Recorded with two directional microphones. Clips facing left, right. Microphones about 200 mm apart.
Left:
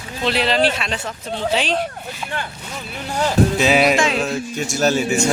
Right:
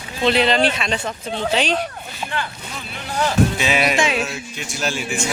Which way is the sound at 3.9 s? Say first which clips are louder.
Left 1 dB; centre (ahead or behind).